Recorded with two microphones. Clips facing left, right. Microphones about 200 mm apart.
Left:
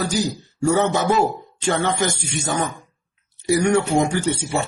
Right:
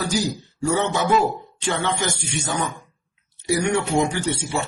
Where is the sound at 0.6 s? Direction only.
45° left (ahead or behind).